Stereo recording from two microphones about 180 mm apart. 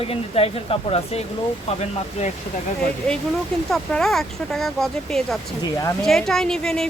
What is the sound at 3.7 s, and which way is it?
A woman's voice, centre (ahead or behind).